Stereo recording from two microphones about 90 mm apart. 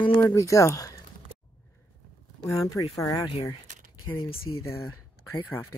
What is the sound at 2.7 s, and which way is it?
Speech, 40° left (ahead or behind).